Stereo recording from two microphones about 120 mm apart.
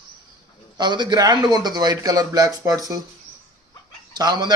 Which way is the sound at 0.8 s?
40° right (ahead or behind).